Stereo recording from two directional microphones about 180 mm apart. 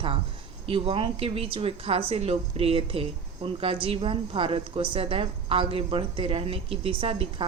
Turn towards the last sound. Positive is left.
turn(degrees=-30)  # may be behind; listen again after turning